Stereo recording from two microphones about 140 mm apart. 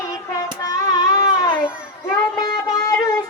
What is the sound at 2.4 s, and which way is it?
Music, 30° left (ahead or behind).